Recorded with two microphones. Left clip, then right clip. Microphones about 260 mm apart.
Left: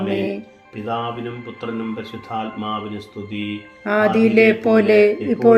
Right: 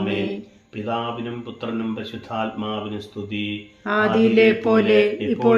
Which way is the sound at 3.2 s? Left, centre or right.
Centre.